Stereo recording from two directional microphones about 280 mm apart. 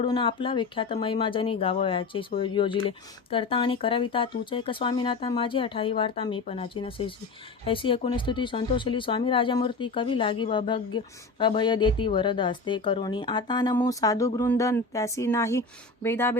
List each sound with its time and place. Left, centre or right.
0.0 s speech: centre